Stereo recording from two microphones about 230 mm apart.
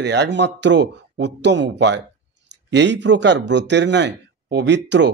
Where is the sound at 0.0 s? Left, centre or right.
Right.